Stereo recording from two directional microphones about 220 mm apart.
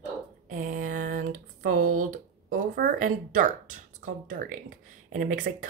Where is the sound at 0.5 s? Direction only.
35° right (ahead or behind).